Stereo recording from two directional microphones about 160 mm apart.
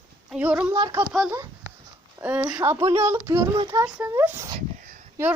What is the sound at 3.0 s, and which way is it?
Speech, 15° right (ahead or behind).